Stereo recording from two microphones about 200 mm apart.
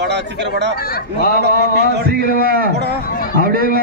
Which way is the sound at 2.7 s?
55° right (ahead or behind).